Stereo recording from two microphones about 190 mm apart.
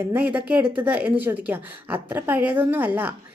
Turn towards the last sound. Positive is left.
turn(degrees=-10)  # may be behind; listen again after turning